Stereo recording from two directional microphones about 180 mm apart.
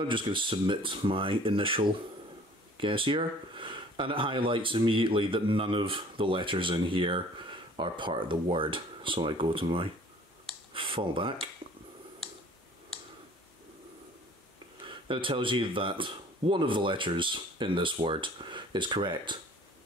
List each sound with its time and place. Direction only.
0.1 s speech: 25° right (ahead or behind)
14.9 s speech: 30° right (ahead or behind)